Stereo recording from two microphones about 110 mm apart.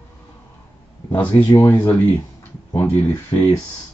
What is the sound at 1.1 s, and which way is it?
Speech, 15° left (ahead or behind).